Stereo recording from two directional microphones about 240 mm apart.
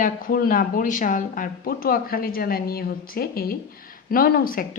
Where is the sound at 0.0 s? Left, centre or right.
Left.